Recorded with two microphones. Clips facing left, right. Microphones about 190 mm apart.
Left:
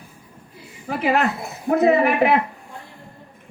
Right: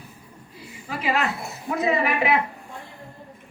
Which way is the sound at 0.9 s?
55° left (ahead or behind).